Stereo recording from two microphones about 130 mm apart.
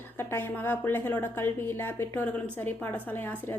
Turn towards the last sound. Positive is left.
turn(degrees=15)  # may be behind; listen again after turning